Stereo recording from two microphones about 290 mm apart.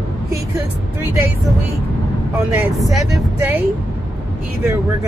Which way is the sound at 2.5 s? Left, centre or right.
Centre.